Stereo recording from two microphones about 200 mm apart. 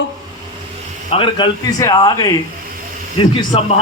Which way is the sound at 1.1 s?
25° left (ahead or behind).